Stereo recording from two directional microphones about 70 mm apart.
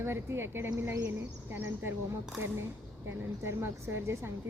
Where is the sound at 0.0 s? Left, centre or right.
Right.